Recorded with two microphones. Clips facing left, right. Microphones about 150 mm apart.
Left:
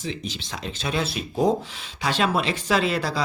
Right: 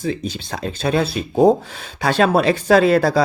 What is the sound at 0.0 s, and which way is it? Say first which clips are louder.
Speech: right 8 dB; 50° right (ahead or behind).